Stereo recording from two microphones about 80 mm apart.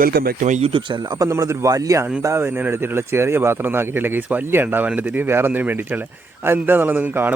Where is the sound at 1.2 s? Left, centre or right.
Right.